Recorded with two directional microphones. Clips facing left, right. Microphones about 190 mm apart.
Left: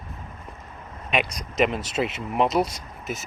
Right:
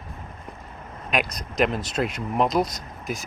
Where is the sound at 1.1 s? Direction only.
5° left (ahead or behind).